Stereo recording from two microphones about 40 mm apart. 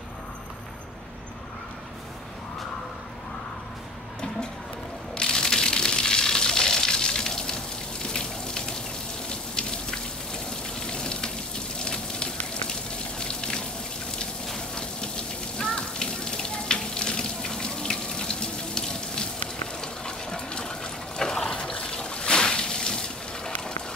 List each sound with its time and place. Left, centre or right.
5.1 s a sound: centre
8.1 s raindrop: centre
10.9 s a sound: centre
11.8 s fire: left
13.2 s water: left
15.5 s water: centre